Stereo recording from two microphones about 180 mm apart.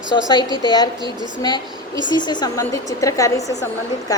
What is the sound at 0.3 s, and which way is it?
A woman's voice, 20° left (ahead or behind).